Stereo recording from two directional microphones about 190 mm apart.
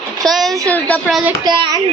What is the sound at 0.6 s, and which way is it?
Speech, 5° left (ahead or behind).